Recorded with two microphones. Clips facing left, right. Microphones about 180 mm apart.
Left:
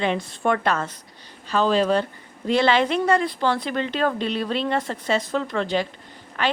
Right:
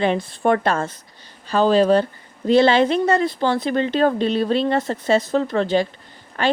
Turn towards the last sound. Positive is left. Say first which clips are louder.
# right 4 dB
turn(degrees=-35)  # may be behind; listen again after turning